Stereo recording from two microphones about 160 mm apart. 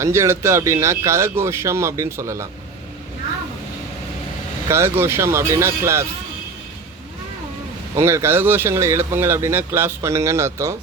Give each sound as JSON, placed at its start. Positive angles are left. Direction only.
{"t": 0.0, "sound": "speech", "side_deg": -15}
{"t": 4.7, "sound": "speech", "side_deg": -15}
{"t": 7.9, "sound": "speech", "side_deg": -15}